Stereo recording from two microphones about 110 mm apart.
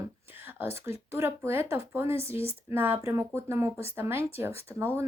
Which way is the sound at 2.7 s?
20° right (ahead or behind).